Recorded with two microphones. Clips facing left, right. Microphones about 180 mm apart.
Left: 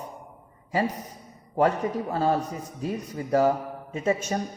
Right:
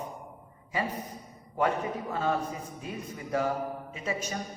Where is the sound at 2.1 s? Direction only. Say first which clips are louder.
Left 4 dB; 35° left (ahead or behind).